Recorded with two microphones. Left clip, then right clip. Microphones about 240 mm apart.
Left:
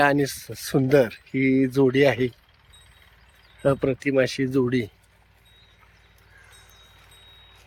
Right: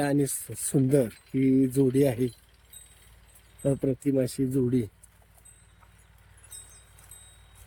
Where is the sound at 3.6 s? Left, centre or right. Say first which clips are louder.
Left 6 dB; left.